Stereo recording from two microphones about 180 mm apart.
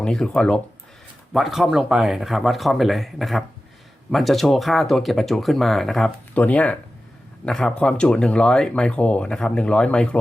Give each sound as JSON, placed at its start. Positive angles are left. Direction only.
{"t": 0.0, "sound": "speech", "side_deg": 5}